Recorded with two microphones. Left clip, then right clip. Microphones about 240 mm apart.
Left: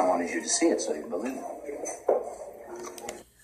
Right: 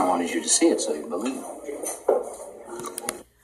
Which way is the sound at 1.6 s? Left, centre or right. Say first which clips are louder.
Right 4 dB; right.